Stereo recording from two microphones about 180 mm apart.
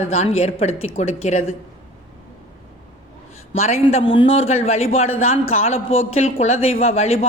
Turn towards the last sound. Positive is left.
turn(degrees=35)  # may be behind; listen again after turning